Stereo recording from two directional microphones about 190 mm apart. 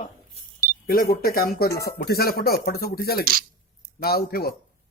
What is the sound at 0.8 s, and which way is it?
Speech, 50° left (ahead or behind).